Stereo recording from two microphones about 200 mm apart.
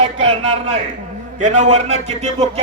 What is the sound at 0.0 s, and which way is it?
A man's voice, 30° right (ahead or behind).